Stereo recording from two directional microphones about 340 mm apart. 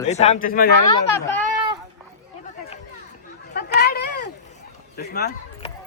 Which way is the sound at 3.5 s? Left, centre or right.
Left.